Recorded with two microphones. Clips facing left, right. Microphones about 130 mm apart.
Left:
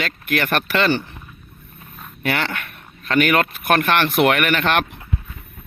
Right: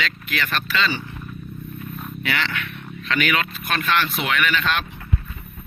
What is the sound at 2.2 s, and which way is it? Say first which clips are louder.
Speech: left 4 dB; 50° left (ahead or behind).